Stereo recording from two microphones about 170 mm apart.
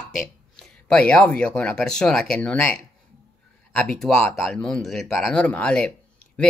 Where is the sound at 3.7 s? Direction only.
5° left (ahead or behind).